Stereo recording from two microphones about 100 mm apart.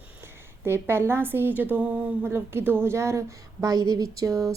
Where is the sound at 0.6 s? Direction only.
25° right (ahead or behind).